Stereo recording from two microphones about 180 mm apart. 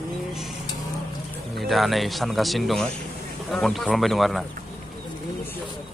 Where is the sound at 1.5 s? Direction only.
Centre (ahead or behind).